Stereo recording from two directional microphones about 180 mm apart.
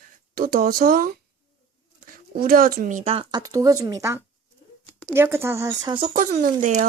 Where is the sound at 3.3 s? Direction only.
20° right (ahead or behind).